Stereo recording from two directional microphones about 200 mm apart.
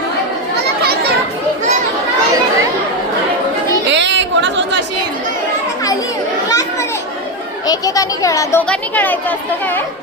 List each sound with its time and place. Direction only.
3.8 s chatter: 65° right (ahead or behind)
7.7 s speech: 15° left (ahead or behind)